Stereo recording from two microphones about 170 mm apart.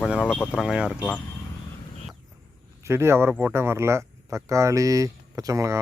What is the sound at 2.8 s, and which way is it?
Speech, 15° right (ahead or behind).